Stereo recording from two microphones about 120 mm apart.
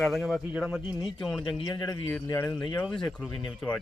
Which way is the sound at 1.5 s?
35° left (ahead or behind).